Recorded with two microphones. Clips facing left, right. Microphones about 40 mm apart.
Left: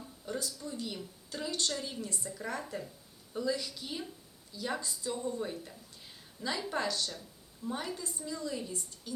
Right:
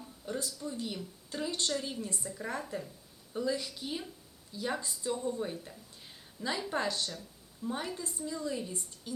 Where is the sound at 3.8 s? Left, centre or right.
Centre.